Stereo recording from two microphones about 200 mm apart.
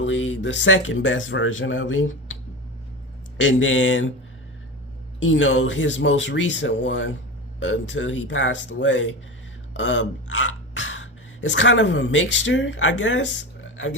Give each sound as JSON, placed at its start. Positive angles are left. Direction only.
{"t": 0.0, "sound": "speech", "side_deg": 70}
{"t": 5.2, "sound": "speech", "side_deg": 75}